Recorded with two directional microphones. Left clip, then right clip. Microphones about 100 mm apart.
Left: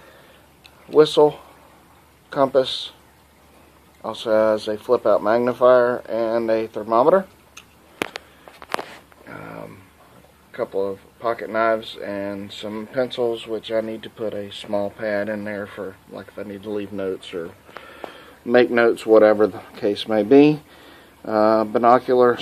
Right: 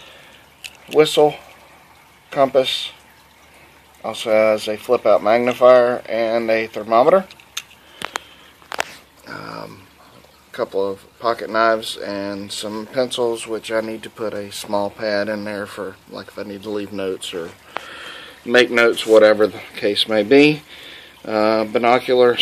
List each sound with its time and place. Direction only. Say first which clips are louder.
0.9 s speech: right 1 dB; centre (ahead or behind)
4.0 s speech: right 3 dB; centre (ahead or behind)
9.3 s dog: right 4 dB; 30° right (ahead or behind)
10.5 s speech: right 3 dB; 30° right (ahead or behind)
15.0 s speech: right 3 dB; 25° right (ahead or behind); by 18.2 s 10° right (ahead or behind)
18.2 s speech: right 2 dB; 10° left (ahead or behind)